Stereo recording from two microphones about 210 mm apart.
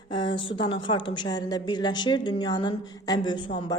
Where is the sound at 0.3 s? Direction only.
25° left (ahead or behind).